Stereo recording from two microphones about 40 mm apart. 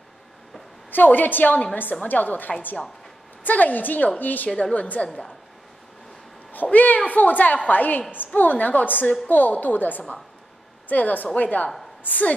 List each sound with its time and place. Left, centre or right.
0.9 s a woman's voice: left
6.5 s a woman's voice: left